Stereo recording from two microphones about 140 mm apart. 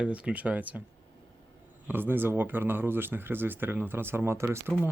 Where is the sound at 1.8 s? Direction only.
15° right (ahead or behind).